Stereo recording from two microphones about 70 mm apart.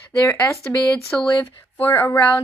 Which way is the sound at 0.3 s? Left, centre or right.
Left.